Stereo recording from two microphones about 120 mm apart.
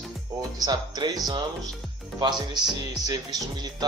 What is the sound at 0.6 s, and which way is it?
A man's voice, 35° right (ahead or behind).